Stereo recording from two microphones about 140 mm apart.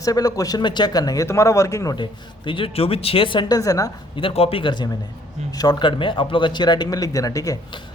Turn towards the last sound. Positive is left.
turn(degrees=25)  # may be behind; listen again after turning